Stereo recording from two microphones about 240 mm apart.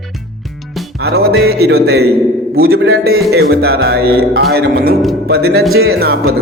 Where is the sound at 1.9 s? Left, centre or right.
Right.